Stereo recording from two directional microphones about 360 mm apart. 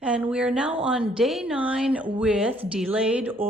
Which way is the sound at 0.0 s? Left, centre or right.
Centre.